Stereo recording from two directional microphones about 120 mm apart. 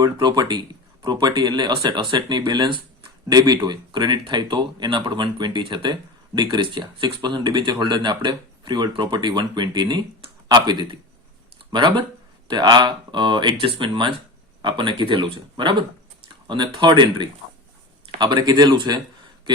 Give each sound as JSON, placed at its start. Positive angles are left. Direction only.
{"t": 0.0, "sound": "speech", "side_deg": -35}